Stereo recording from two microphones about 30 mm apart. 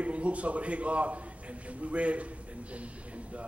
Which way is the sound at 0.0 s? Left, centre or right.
Right.